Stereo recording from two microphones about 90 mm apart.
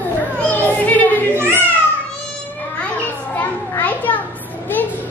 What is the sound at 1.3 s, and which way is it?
Babbling, 25° right (ahead or behind).